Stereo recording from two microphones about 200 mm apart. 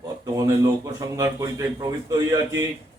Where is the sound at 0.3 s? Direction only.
15° right (ahead or behind).